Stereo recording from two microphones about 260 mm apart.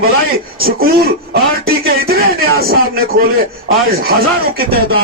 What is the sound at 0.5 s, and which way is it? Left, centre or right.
Speech, right.